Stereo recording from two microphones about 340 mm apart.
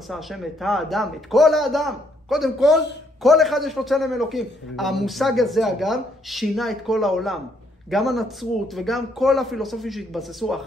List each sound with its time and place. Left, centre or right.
0.1 s a man's voice: centre